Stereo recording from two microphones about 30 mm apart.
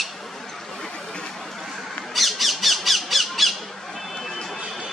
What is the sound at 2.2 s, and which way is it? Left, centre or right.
Squawk, centre.